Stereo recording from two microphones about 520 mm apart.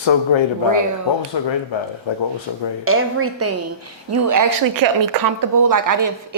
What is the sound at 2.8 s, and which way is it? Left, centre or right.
A woman's voice, right.